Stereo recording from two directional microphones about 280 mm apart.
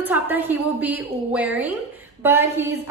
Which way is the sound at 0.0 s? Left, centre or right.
Centre.